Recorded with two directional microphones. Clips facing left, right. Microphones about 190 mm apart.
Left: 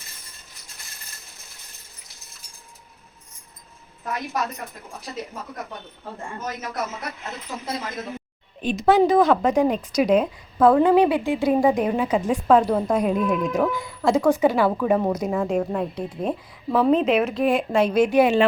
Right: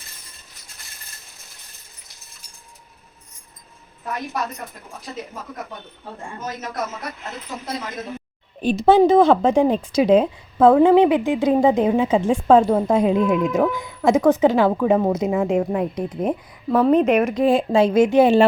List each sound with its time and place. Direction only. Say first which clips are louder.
8.6 s a woman's voice: right 4 dB; 30° right (ahead or behind)
16.5 s a woman's voice: right 2 dB; centre (ahead or behind)
16.9 s speech: right 3 dB; 10° right (ahead or behind)
17.4 s a woman's voice: right 4 dB; 30° right (ahead or behind)